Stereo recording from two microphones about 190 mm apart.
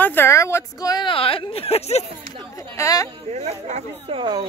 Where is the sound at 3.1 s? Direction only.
35° right (ahead or behind).